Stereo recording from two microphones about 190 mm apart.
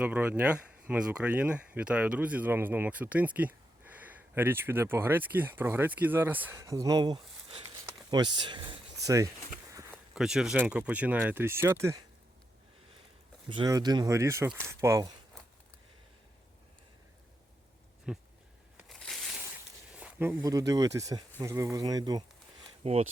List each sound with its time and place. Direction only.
0.0 s speech: 10° right (ahead or behind)
10.2 s speech: 5° right (ahead or behind)
13.5 s speech: 20° right (ahead or behind)
18.1 s speech: 5° right (ahead or behind)
18.8 s crushing: centre (ahead or behind)
20.0 s speech: 10° right (ahead or behind)
22.8 s speech: 30° right (ahead or behind)